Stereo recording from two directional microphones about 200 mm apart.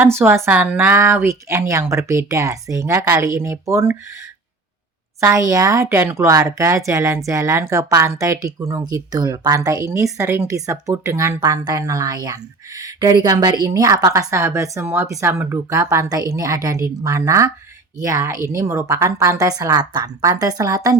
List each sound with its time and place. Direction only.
0.0 s speech: 10° right (ahead or behind)
5.2 s speech: 15° right (ahead or behind)